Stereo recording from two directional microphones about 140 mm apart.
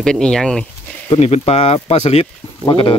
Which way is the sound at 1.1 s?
45° left (ahead or behind).